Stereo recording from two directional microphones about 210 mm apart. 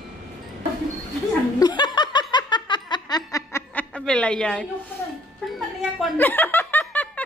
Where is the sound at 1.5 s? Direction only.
20° left (ahead or behind).